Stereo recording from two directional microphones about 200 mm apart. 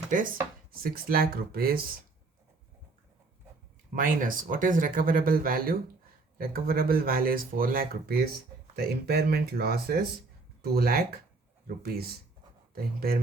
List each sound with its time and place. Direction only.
0.7 s speech: 45° right (ahead or behind)
3.9 s speech: 45° right (ahead or behind)